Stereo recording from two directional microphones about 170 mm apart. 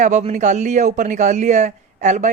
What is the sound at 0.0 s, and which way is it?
Speech, 45° right (ahead or behind).